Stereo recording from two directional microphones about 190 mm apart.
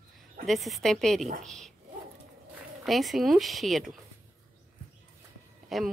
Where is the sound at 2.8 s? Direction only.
Centre (ahead or behind).